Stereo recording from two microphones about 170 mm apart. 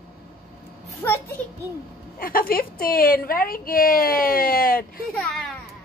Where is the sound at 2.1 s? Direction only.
55° left (ahead or behind).